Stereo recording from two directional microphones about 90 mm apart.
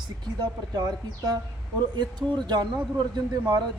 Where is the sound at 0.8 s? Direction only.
45° right (ahead or behind).